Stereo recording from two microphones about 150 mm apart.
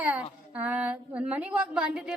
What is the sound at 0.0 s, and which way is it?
A woman's voice, 10° right (ahead or behind).